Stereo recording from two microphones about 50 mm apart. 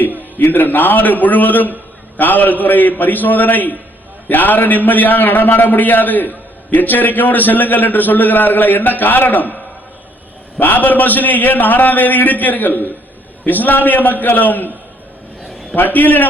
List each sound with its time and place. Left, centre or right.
0.3 s a man's voice: left
10.6 s a man's voice: left
15.4 s a sound: centre
15.7 s a man's voice: left